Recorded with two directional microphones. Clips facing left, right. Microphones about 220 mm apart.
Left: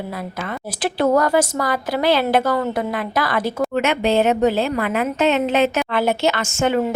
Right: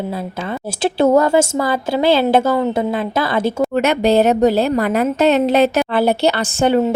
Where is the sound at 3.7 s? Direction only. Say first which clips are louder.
Right 4 dB; 40° right (ahead or behind).